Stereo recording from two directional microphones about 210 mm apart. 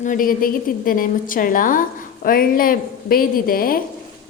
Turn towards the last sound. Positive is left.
turn(degrees=45)  # may be behind; listen again after turning